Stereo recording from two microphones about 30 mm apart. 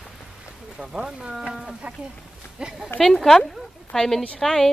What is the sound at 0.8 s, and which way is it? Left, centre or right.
Speech, centre.